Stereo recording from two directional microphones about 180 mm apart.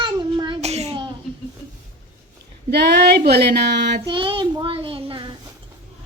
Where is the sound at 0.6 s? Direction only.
35° right (ahead or behind).